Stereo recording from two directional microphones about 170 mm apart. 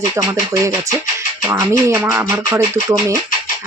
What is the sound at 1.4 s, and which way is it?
Speech, 15° right (ahead or behind).